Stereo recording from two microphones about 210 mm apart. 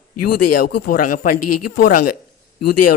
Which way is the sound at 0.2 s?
45° left (ahead or behind).